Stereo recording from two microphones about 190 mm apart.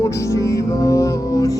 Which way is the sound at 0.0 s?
15° left (ahead or behind).